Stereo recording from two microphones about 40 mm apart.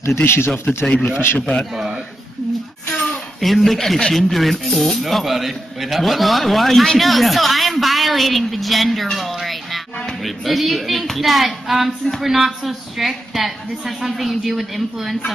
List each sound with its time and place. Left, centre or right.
0.2 s speech: left
0.8 s a man's voice: left
1.4 s a man's voice: centre
2.9 s a woman's voice: centre